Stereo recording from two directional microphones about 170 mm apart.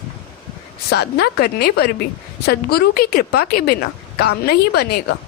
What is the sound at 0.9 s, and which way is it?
A woman's voice, 75° left (ahead or behind).